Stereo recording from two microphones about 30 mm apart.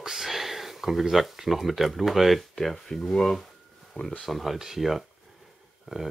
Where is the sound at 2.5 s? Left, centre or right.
Centre.